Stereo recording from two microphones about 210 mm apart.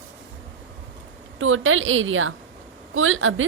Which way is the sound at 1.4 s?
70° right (ahead or behind).